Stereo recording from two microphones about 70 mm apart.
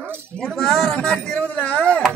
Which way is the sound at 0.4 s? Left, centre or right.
Centre.